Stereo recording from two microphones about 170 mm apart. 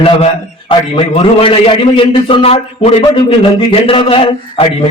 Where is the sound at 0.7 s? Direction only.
30° left (ahead or behind).